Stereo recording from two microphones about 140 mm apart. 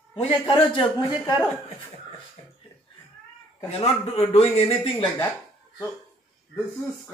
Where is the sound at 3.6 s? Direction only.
45° left (ahead or behind).